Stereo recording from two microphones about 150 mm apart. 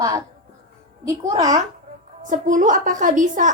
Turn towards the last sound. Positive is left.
turn(degrees=-60)  # may be behind; listen again after turning